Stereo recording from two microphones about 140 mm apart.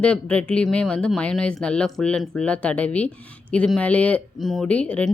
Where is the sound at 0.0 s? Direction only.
10° left (ahead or behind).